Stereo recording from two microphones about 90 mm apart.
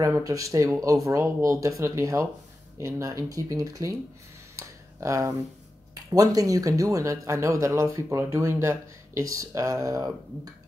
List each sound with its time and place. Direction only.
0.2 s speech: 40° right (ahead or behind)
4.6 s a sound: 35° right (ahead or behind)
6.1 s speech: 40° right (ahead or behind)